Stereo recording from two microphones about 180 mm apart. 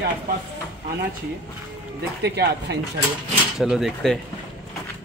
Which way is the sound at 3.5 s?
Centre (ahead or behind).